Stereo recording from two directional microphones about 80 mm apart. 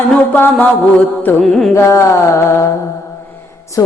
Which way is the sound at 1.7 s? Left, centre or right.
Left.